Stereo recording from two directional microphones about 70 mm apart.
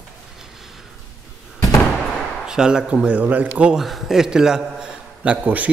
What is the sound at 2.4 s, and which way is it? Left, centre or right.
A man's voice, centre.